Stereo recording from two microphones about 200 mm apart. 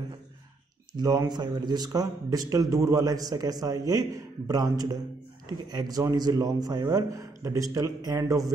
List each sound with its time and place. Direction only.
0.9 s speech: 20° right (ahead or behind)